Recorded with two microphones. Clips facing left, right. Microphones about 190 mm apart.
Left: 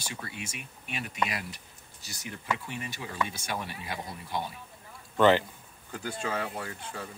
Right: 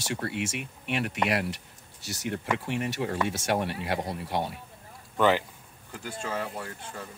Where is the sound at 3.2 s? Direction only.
80° right.